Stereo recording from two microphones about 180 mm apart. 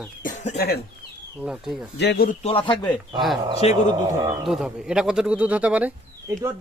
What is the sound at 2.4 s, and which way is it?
A man's voice, 30° left (ahead or behind).